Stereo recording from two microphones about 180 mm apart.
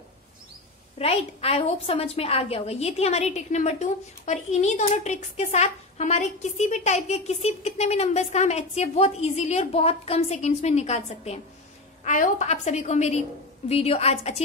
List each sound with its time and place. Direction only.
0.9 s a woman's voice: 35° left (ahead or behind)